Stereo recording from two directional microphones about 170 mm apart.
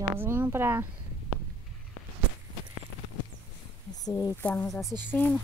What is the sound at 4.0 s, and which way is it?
Speech, 20° left (ahead or behind).